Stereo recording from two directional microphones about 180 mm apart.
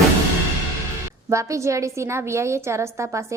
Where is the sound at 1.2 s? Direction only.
15° right (ahead or behind).